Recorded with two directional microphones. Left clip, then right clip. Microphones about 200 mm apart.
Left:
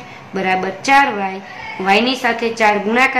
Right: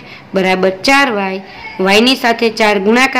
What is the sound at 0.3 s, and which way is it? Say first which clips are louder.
A woman's voice: right 6 dB; 45° right (ahead or behind).